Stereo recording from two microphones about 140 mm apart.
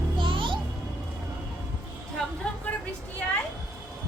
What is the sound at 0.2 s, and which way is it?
Music, 35° right (ahead or behind).